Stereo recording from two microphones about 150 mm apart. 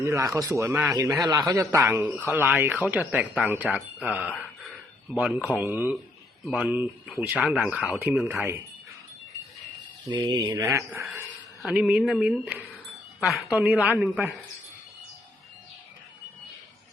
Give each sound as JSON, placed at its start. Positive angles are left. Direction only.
{"t": 0.0, "sound": "a man's voice", "side_deg": -20}
{"t": 6.4, "sound": "a man's voice", "side_deg": 0}
{"t": 10.1, "sound": "speech", "side_deg": -30}
{"t": 11.3, "sound": "a man's voice", "side_deg": -5}